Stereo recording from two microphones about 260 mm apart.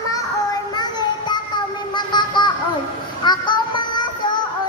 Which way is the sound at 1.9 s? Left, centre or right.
Centre.